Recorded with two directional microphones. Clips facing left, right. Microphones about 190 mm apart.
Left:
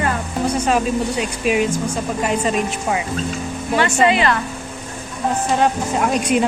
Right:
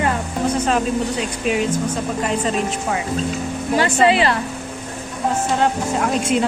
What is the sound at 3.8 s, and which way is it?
Speech, 35° right (ahead or behind).